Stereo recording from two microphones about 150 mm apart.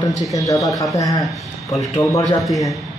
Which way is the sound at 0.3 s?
20° left (ahead or behind).